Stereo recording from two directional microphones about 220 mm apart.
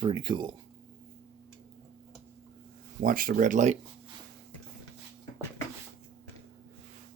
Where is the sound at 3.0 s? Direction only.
40° right (ahead or behind).